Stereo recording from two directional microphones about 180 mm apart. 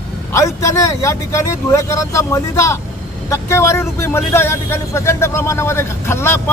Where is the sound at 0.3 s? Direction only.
15° left (ahead or behind).